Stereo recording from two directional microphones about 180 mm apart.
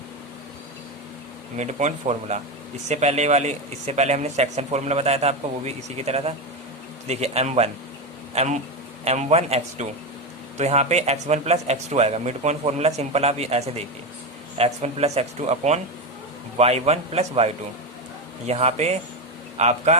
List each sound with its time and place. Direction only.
1.5 s speech: 40° right (ahead or behind)